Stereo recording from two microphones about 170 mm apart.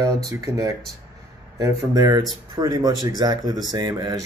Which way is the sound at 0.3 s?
20° right (ahead or behind).